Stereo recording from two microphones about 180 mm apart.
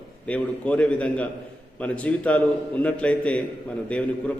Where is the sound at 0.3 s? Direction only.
5° left (ahead or behind).